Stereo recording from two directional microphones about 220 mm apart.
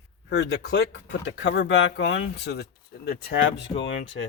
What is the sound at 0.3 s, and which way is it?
Speech, 50° left (ahead or behind).